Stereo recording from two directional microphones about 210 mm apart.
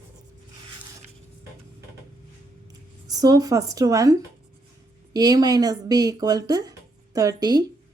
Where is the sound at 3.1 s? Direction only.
15° right (ahead or behind).